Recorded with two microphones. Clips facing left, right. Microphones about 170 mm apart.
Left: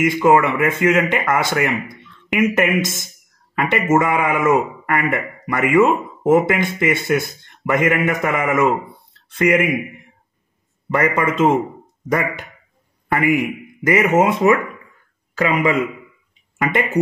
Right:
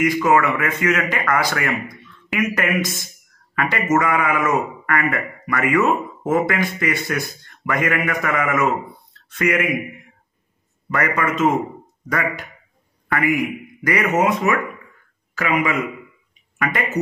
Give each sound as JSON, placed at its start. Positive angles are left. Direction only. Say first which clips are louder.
{"t": 0.0, "sound": "a man's voice", "louder": "left 3 dB", "side_deg": 25}
{"t": 10.9, "sound": "a man's voice", "louder": "left 3 dB", "side_deg": 25}